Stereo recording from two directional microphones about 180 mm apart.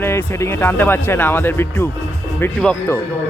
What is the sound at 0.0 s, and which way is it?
Speech, 15° left (ahead or behind).